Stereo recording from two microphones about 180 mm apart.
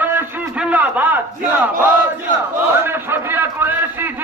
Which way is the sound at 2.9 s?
10° right (ahead or behind).